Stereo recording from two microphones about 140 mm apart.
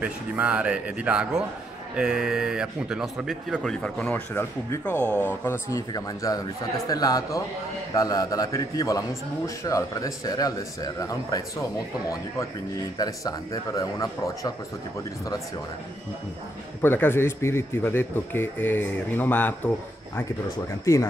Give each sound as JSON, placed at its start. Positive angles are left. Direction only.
{"t": 0.0, "sound": "a man's voice", "side_deg": -10}
{"t": 4.3, "sound": "a man's voice", "side_deg": 20}
{"t": 12.9, "sound": "a man's voice", "side_deg": 25}
{"t": 16.8, "sound": "a man's voice", "side_deg": 15}